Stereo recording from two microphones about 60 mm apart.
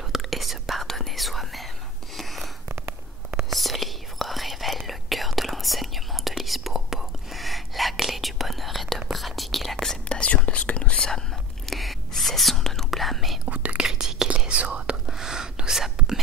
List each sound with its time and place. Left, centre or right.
0.1 s whispering: centre
2.1 s a sound: centre
3.4 s whispering: centre
10.0 s whispering: centre
13.5 s whispering: right
13.8 s whispering: centre
15.0 s whispering: centre